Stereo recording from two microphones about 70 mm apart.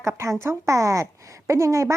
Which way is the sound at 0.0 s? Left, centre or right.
Right.